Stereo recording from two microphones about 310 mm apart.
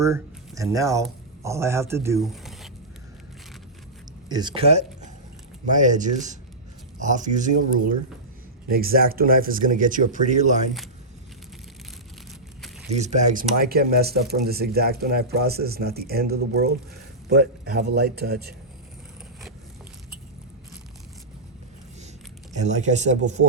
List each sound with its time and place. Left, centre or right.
0.0 s speech: centre
4.3 s speech: centre
12.9 s speech: right
22.5 s speech: right